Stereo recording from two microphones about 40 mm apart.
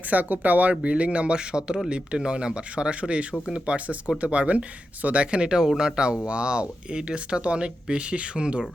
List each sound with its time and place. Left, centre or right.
0.1 s speech: right
0.7 s speech: right